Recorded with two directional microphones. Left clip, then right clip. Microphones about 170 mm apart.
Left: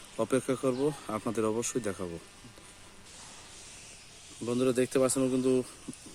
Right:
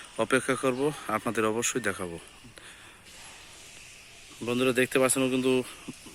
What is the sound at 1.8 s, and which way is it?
Speech, 10° right (ahead or behind).